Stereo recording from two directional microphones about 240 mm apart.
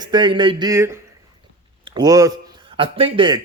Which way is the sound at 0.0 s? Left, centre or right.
Centre.